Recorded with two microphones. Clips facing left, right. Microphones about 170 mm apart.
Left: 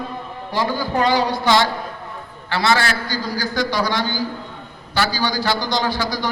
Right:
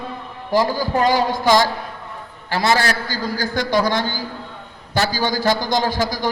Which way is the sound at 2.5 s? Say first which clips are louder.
Right 1 dB; 40° right (ahead or behind).